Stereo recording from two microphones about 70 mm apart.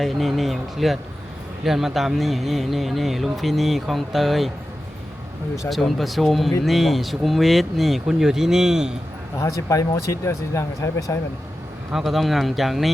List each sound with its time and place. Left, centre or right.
0.0 s speech: centre
5.6 s speech: centre
9.4 s speech: left
11.9 s speech: centre